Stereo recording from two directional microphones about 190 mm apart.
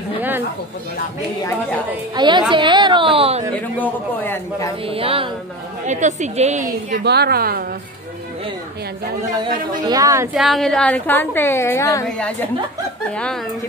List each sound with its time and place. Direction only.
2.1 s a woman's voice: 25° right (ahead or behind)
3.5 s a woman's voice: 10° left (ahead or behind)
4.8 s a woman's voice: 30° right (ahead or behind)
7.0 s a woman's voice: 60° right (ahead or behind)
9.4 s a woman's voice: 20° right (ahead or behind)
10.3 s a woman's voice: centre (ahead or behind); by 12.1 s 15° left (ahead or behind)